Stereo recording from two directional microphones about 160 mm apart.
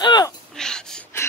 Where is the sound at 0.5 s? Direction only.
5° left (ahead or behind).